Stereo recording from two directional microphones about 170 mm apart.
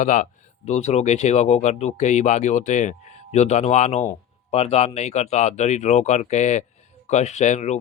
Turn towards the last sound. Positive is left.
turn(degrees=40)  # may be behind; listen again after turning